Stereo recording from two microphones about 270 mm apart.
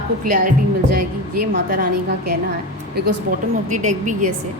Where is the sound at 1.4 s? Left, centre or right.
Right.